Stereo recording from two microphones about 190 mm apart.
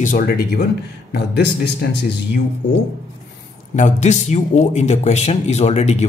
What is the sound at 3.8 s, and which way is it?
Speech, 40° left (ahead or behind).